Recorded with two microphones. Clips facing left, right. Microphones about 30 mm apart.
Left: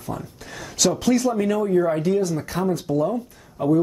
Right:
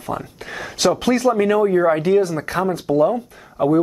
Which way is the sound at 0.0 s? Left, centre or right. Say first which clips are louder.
Right 5 dB; right.